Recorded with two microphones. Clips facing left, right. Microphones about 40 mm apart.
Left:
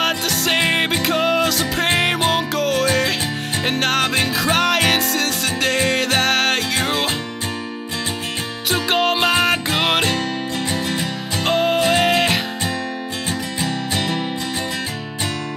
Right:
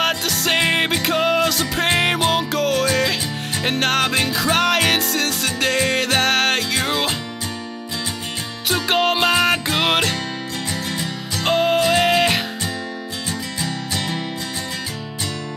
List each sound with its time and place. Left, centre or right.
0.0 s music: centre
8.8 s music: centre
10.7 s music: left
11.4 s music: centre
13.6 s music: left